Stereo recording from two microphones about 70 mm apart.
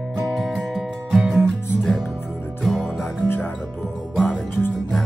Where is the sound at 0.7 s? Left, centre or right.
Centre.